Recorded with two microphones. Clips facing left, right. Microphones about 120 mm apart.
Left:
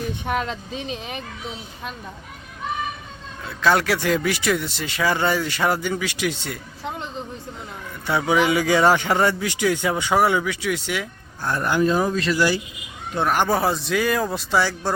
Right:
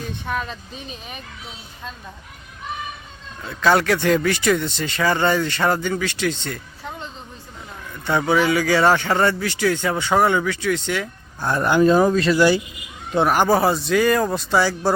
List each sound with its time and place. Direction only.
0.3 s speech: 80° left
3.4 s speech: centre (ahead or behind)
8.0 s speech: 5° left (ahead or behind)
8.4 s speech: 20° left (ahead or behind)
11.4 s speech: 25° right (ahead or behind)
11.9 s speech: 45° right (ahead or behind)
12.3 s speech: 25° right (ahead or behind)
13.2 s speech: 5° right (ahead or behind)